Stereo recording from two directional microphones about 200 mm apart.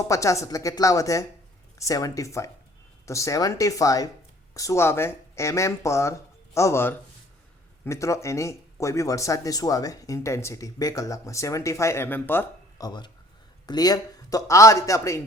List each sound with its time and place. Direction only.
0.1 s speech: 15° left (ahead or behind)